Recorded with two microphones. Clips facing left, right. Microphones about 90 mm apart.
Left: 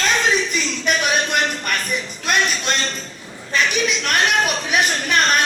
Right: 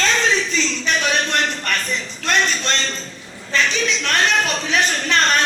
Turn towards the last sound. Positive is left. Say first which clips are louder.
# even
turn(degrees=10)  # may be behind; listen again after turning